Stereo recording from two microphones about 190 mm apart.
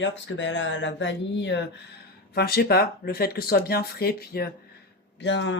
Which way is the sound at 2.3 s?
55° left (ahead or behind).